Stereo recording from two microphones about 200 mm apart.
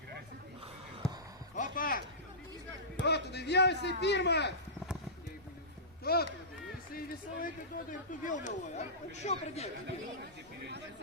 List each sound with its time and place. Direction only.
1.5 s a sound: 40° left (ahead or behind)
3.0 s a man's voice: 55° left (ahead or behind)
6.9 s speech: 45° left (ahead or behind)